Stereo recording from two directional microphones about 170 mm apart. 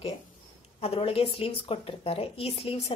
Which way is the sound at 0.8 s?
35° left (ahead or behind).